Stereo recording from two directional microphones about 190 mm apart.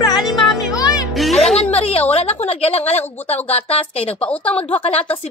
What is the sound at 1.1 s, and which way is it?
Speech, centre (ahead or behind).